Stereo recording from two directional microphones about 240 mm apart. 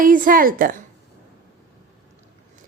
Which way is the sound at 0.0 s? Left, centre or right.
Right.